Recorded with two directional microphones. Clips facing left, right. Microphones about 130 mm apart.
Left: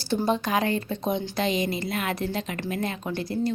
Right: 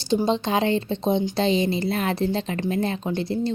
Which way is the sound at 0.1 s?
20° right (ahead or behind).